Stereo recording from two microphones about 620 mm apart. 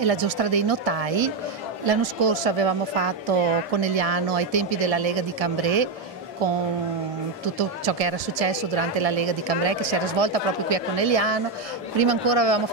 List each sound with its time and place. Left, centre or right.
0.0 s a woman's voice: right
7.5 s a woman's voice: right